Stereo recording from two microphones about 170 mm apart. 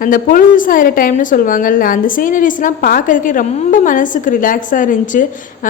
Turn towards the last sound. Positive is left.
turn(degrees=50)  # may be behind; listen again after turning